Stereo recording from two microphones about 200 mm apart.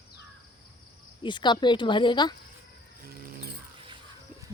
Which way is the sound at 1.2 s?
25° left (ahead or behind).